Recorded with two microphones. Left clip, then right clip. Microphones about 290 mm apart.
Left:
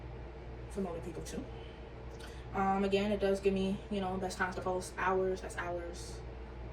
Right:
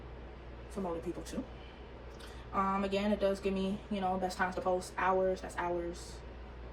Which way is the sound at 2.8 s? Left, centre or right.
Centre.